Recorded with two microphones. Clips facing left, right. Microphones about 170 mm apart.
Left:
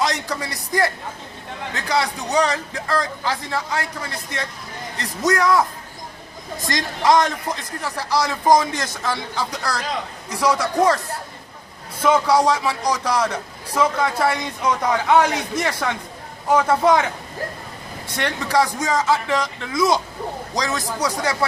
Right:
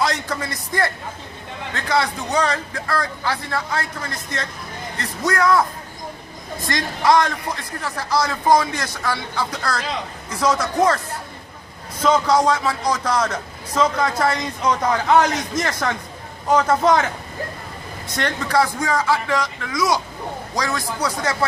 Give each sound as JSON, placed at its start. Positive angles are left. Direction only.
{"t": 0.0, "sound": "speech", "side_deg": 15}
{"t": 6.7, "sound": "speech", "side_deg": 20}
{"t": 12.0, "sound": "speech", "side_deg": 10}
{"t": 18.2, "sound": "a man's voice", "side_deg": 10}